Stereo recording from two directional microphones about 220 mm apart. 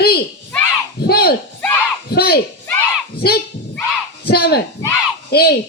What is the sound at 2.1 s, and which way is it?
A woman's voice, 45° left (ahead or behind).